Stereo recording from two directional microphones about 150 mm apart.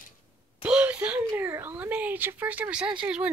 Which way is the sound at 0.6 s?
10° right (ahead or behind).